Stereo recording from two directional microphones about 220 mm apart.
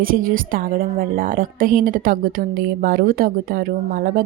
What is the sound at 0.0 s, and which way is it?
A woman's voice, 40° right (ahead or behind).